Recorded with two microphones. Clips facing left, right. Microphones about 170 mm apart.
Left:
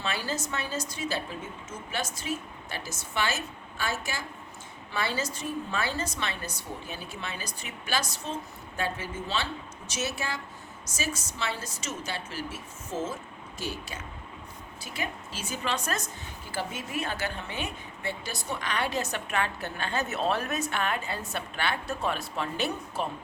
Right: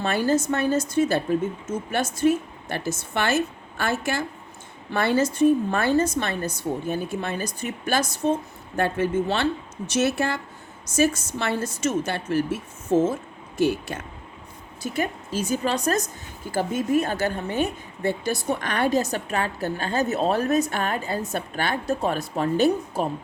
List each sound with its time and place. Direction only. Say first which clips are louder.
0.0 s a woman's voice: right 11 dB; 50° right (ahead or behind)
14.8 s a woman's voice: right 9 dB; 45° right (ahead or behind)